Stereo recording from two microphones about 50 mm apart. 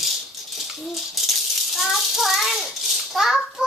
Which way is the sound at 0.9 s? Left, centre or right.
Centre.